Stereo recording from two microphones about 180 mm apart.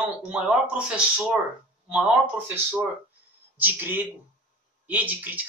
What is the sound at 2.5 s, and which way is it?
Speech, 10° right (ahead or behind).